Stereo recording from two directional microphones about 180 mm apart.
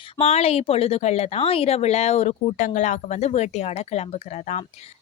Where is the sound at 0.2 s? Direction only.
35° left (ahead or behind).